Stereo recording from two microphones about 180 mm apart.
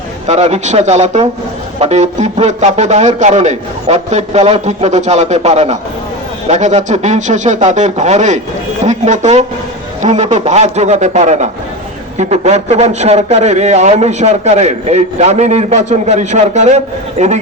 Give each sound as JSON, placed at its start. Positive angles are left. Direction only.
{"t": 0.3, "sound": "a man's voice", "side_deg": -40}